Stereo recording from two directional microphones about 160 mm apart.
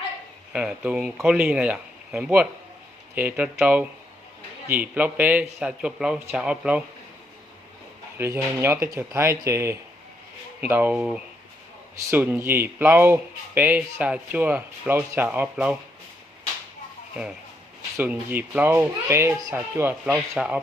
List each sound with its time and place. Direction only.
0.5 s speech: 10° right (ahead or behind)
8.2 s speech: 15° right (ahead or behind)
18.0 s speech: 10° right (ahead or behind)